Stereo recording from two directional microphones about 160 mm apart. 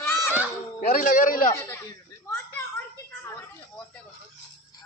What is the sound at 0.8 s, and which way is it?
Speech, 55° left (ahead or behind).